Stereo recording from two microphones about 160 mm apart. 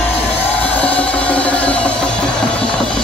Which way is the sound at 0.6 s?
10° left (ahead or behind).